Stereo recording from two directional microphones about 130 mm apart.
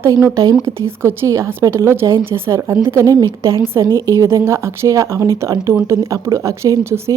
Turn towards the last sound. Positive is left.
turn(degrees=-20)  # may be behind; listen again after turning